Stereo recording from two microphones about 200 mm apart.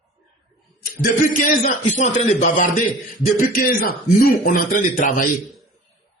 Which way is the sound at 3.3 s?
45° left (ahead or behind).